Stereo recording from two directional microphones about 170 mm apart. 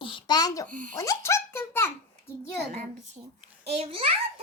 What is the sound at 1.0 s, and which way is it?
A child's voice, 15° left (ahead or behind).